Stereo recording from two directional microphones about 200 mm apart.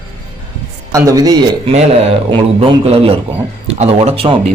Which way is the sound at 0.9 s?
15° right (ahead or behind).